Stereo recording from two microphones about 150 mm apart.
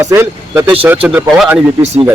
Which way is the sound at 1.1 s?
Centre (ahead or behind).